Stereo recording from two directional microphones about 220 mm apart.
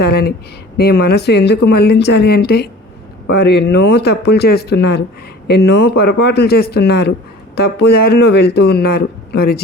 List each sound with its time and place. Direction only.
0.0 s speech: 45° left (ahead or behind)